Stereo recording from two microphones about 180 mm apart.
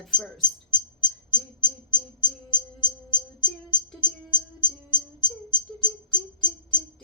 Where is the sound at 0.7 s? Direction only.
25° left (ahead or behind).